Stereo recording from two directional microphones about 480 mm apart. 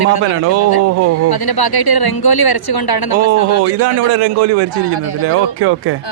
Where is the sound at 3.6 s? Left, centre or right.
Right.